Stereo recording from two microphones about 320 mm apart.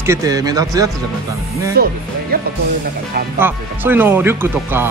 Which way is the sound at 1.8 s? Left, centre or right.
Right.